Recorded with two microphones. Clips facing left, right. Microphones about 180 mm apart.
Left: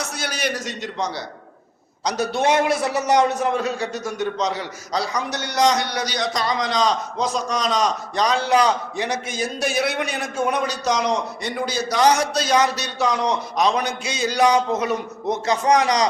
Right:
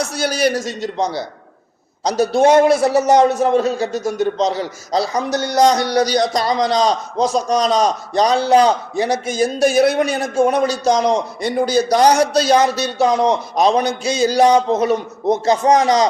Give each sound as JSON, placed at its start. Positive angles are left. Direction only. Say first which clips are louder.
{"t": 0.0, "sound": "a man's voice", "louder": "right 9 dB", "side_deg": -35}